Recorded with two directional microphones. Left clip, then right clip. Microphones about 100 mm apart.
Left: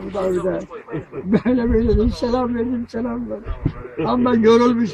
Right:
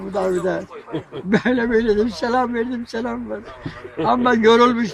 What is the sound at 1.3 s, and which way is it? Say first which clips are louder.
Speech: right 1 dB; centre (ahead or behind).